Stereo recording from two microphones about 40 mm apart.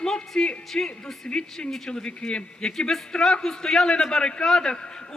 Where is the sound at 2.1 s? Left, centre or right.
Left.